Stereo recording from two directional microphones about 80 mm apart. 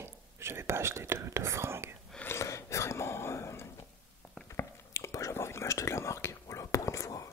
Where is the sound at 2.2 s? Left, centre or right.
Left.